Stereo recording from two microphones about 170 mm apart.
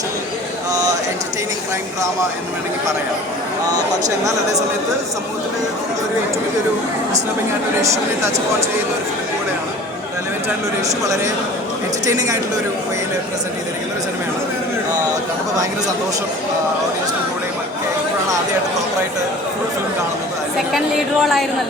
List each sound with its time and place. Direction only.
10.8 s a man's voice: 20° right (ahead or behind)
20.7 s speech: centre (ahead or behind)